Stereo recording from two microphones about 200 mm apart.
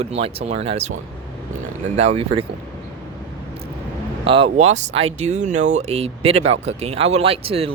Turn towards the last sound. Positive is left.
turn(degrees=-30)  # may be behind; listen again after turning